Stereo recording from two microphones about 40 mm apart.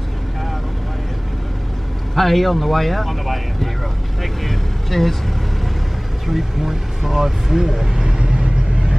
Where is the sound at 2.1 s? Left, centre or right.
Centre.